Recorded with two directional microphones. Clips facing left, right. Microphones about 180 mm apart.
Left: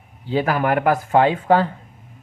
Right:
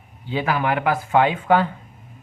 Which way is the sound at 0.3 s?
40° left (ahead or behind).